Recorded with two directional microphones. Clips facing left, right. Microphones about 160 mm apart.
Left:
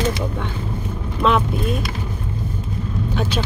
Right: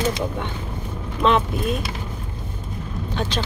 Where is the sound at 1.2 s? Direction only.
Centre (ahead or behind).